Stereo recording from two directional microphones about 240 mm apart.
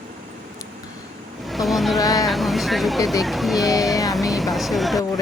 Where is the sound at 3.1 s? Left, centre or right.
Centre.